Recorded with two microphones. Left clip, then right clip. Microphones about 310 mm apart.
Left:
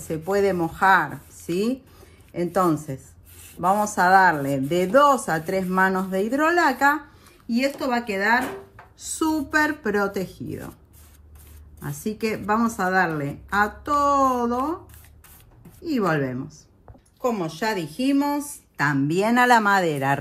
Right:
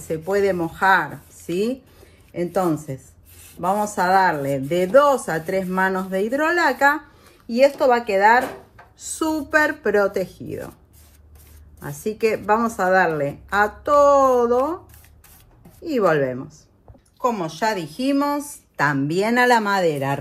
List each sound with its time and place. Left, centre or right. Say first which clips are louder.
0.0 s speech: right 2 dB; centre
5.2 s a woman's voice: right 1 dB; centre
6.6 s a woman's voice: right 2 dB; centre
11.8 s a woman's voice: right 6 dB; centre
15.8 s a woman's voice: right 5 dB; centre
17.6 s a woman's voice: right 3 dB; centre